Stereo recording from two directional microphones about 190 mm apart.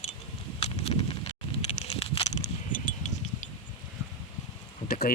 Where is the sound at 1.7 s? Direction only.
35° left (ahead or behind).